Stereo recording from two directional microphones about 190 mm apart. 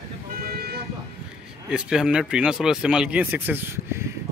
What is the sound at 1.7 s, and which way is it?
Speech, 5° right (ahead or behind).